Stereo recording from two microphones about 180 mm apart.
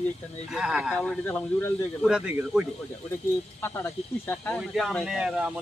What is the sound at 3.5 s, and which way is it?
Speech, 15° left (ahead or behind).